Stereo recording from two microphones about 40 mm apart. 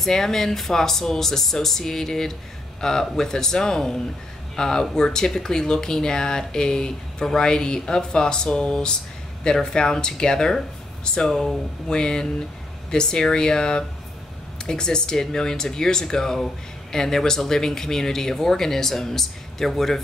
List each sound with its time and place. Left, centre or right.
0.0 s speech: centre
11.9 s speech: left